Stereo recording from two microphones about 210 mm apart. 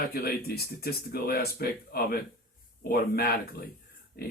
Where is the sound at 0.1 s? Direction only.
45° left (ahead or behind).